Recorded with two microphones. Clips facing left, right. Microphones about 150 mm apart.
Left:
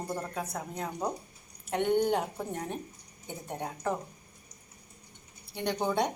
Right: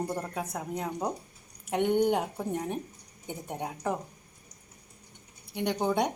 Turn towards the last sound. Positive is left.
turn(degrees=-15)  # may be behind; listen again after turning